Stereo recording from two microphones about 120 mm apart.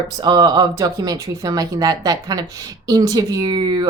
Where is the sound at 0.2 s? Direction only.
35° right (ahead or behind).